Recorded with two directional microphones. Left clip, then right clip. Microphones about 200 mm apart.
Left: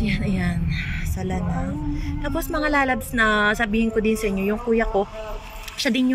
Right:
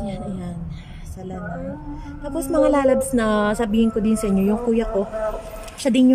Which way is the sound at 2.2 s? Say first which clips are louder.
Right 6 dB; 15° right (ahead or behind).